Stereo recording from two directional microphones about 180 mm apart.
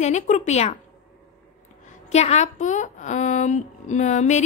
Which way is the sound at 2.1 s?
40° left (ahead or behind).